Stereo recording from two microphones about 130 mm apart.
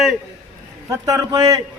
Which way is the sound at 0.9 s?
25° right (ahead or behind).